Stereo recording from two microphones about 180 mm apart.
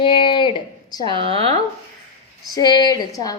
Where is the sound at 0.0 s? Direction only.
25° left (ahead or behind).